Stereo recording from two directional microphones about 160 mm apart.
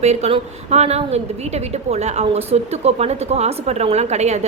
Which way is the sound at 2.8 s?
40° right (ahead or behind).